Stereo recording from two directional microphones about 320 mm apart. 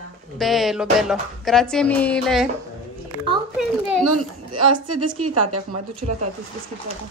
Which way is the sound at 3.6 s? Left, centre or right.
Centre.